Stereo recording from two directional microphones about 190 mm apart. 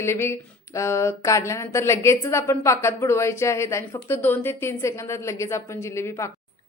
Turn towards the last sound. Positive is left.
turn(degrees=15)  # may be behind; listen again after turning